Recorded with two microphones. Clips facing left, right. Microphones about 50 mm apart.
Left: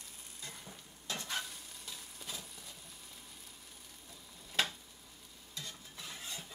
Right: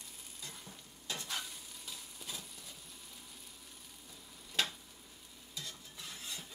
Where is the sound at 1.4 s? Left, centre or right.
Centre.